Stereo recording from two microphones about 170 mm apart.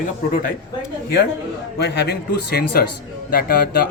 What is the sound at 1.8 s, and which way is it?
A man's voice, 70° left (ahead or behind).